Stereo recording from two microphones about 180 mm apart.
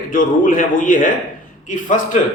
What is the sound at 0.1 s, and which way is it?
A man's voice, 50° left (ahead or behind).